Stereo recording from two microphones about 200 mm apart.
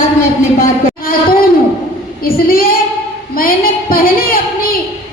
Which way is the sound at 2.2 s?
50° left (ahead or behind).